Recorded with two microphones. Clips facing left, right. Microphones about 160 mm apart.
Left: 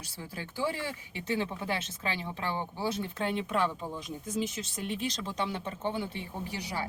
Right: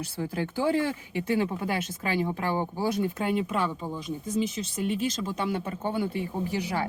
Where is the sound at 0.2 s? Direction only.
55° right (ahead or behind).